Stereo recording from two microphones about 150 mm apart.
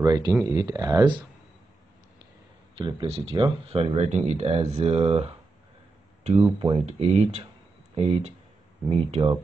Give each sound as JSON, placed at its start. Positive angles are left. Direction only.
{"t": 0.0, "sound": "speech", "side_deg": -25}
{"t": 2.8, "sound": "speech", "side_deg": -35}
{"t": 6.6, "sound": "speech", "side_deg": -40}